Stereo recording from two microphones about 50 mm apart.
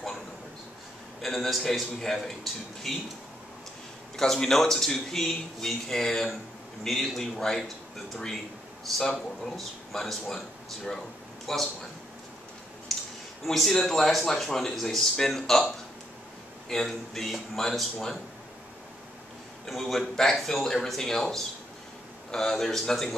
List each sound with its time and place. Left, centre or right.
1.2 s a man's voice: centre
4.2 s a man's voice: centre
12.9 s a sound: centre
13.5 s speech: centre
19.7 s speech: centre